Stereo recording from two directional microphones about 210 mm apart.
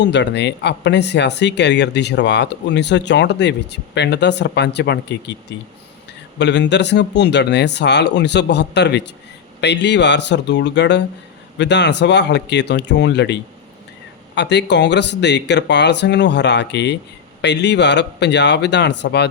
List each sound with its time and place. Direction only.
0.0 s speech: 55° left (ahead or behind)